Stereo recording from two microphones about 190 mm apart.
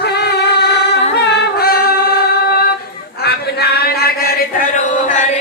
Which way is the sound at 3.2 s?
55° left (ahead or behind).